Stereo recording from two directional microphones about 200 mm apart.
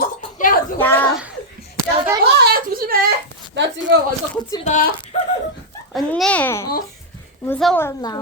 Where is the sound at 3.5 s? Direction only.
65° right (ahead or behind).